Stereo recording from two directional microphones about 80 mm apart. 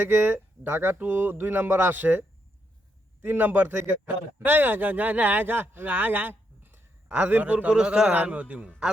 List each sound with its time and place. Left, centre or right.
0.0 s a man's voice: right